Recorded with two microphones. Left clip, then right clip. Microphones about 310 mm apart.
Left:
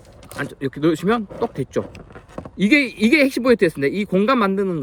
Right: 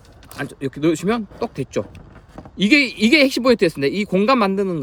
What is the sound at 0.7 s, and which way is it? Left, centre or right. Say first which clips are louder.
Speech: left 1 dB; centre.